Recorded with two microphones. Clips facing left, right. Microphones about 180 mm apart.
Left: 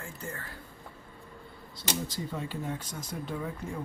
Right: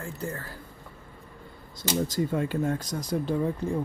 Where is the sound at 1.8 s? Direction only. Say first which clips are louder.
Right 8 dB; 45° right (ahead or behind).